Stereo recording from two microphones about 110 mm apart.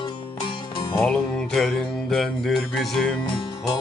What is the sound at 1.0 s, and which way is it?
Music, 5° left (ahead or behind).